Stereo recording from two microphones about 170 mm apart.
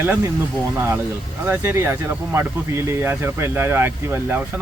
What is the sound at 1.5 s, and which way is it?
Speech, 15° right (ahead or behind).